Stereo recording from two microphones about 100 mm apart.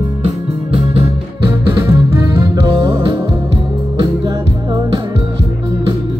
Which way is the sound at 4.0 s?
45° right (ahead or behind).